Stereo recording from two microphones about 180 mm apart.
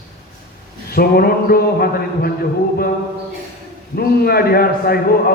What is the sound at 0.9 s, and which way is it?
A man's voice, 60° left (ahead or behind).